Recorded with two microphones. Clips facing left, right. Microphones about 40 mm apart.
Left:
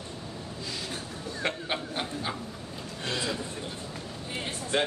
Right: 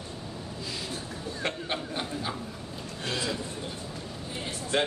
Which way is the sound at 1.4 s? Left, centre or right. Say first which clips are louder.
Left 1 dB; centre.